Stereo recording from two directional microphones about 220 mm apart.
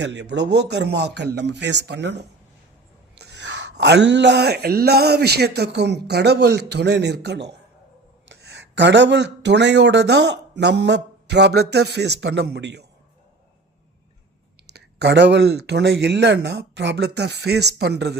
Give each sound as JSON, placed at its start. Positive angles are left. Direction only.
{"t": 0.0, "sound": "speech", "side_deg": -50}
{"t": 3.2, "sound": "speech", "side_deg": -50}
{"t": 14.7, "sound": "speech", "side_deg": -50}